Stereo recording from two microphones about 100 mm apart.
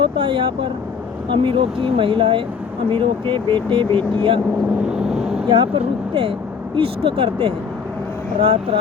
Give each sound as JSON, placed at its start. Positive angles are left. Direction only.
{"t": 0.0, "sound": "speech", "side_deg": -60}
{"t": 4.9, "sound": "vehicle", "side_deg": -5}
{"t": 5.5, "sound": "speech", "side_deg": -55}